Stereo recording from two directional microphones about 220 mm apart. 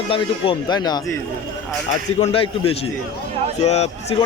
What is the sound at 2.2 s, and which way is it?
Speech, 25° left (ahead or behind).